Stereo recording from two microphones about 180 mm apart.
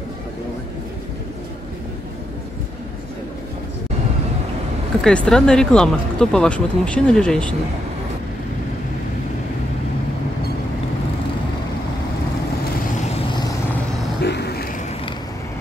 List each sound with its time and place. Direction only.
5.0 s speech: 5° left (ahead or behind)
14.2 s vehicle: 65° left (ahead or behind)